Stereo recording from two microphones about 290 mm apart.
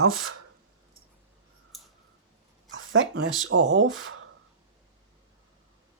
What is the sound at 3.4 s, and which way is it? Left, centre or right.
Speech, right.